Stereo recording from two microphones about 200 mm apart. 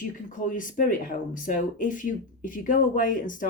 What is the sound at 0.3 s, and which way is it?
Speech, 40° left (ahead or behind).